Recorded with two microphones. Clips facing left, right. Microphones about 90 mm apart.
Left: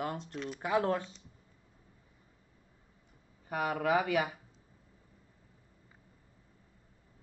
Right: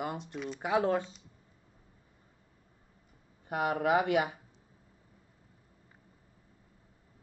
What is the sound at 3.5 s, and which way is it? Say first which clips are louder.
Speech: right 2 dB; 25° right (ahead or behind).